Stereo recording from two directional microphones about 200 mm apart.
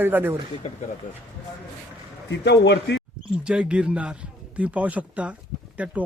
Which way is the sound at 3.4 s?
5° right (ahead or behind).